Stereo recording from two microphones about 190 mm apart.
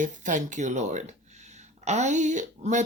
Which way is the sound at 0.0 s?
40° right (ahead or behind).